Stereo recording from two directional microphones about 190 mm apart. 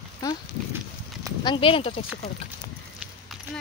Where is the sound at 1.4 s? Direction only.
25° left (ahead or behind).